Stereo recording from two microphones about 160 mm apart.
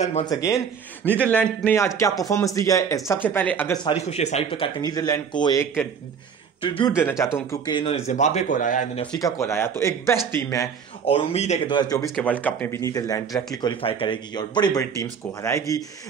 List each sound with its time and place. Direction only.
0.0 s speech: 45° left (ahead or behind)
0.3 s speech: 20° left (ahead or behind)
1.0 s speech: 10° left (ahead or behind)
3.8 s speech: 40° left (ahead or behind); by 5.6 s 25° left (ahead or behind)
6.6 s speech: 35° left (ahead or behind)
7.0 s speech: 15° left (ahead or behind)
7.7 s speech: 40° left (ahead or behind); by 8.8 s 55° left (ahead or behind)
9.2 s speech: 15° left (ahead or behind)
11.1 s speech: 40° left (ahead or behind)
11.6 s speech: 25° left (ahead or behind)
12.2 s speech: 10° left (ahead or behind)
12.8 s speech: 20° left (ahead or behind)